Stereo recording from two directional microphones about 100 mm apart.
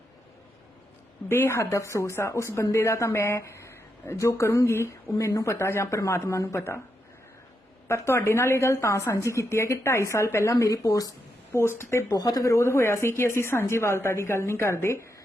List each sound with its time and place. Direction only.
1.3 s a woman's voice: 25° left (ahead or behind)
7.9 s a woman's voice: 25° left (ahead or behind)
11.5 s a woman's voice: 25° left (ahead or behind)
12.1 s a woman's voice: 40° left (ahead or behind)